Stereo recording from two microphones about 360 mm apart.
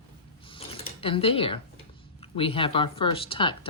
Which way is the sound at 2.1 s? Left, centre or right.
Centre.